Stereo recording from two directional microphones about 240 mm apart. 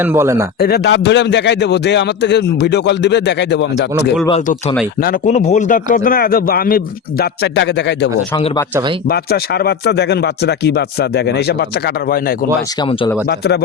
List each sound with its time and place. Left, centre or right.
0.0 s a man's voice: centre
0.6 s a man's voice: left
4.3 s a man's voice: left
12.8 s speech: left
13.2 s a man's voice: left